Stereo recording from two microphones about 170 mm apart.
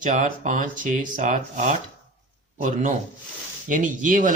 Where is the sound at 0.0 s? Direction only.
50° right (ahead or behind).